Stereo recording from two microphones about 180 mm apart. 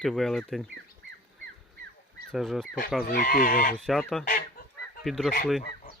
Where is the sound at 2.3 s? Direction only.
Centre (ahead or behind).